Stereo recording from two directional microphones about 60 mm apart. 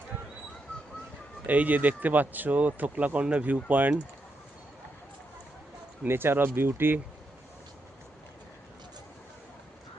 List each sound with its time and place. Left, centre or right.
1.5 s speech: right
6.1 s speech: right